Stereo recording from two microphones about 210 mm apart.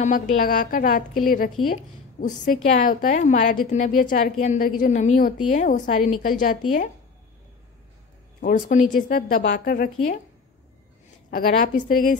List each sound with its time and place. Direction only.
0.0 s a woman's voice: 40° left (ahead or behind)
8.4 s a woman's voice: 40° left (ahead or behind)
11.2 s a woman's voice: 45° left (ahead or behind)